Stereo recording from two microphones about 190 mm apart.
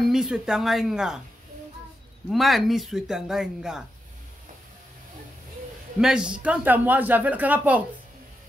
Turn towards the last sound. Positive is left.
turn(degrees=-10)  # may be behind; listen again after turning